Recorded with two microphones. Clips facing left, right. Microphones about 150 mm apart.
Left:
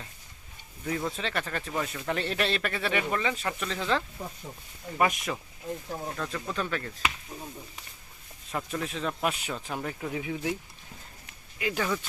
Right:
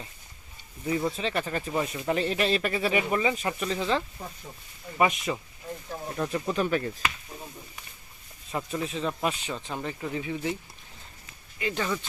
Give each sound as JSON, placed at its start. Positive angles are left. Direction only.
{"t": 0.9, "sound": "speech", "side_deg": -10}
{"t": 6.1, "sound": "speech", "side_deg": -20}
{"t": 8.5, "sound": "speech", "side_deg": -5}
{"t": 11.6, "sound": "speech", "side_deg": 5}